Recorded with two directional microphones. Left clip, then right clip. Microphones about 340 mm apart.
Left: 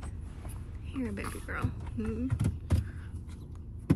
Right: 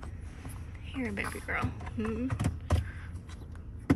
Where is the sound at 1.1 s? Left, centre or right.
Centre.